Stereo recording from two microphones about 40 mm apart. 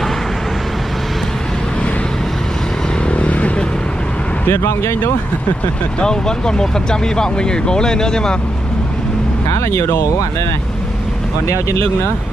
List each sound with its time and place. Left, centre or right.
3.1 s vehicle: left
4.5 s speech: left
5.9 s speech: centre
9.7 s speech: left